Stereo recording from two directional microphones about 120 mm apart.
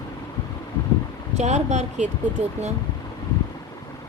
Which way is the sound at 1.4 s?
75° right (ahead or behind).